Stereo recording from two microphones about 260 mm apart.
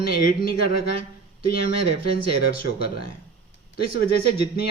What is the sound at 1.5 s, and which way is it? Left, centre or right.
Speech, left.